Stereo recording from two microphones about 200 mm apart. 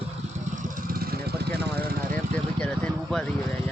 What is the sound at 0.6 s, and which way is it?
Vehicle, 45° right (ahead or behind).